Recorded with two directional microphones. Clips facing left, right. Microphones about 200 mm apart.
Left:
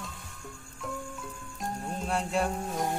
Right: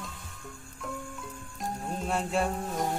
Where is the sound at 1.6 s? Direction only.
Centre (ahead or behind).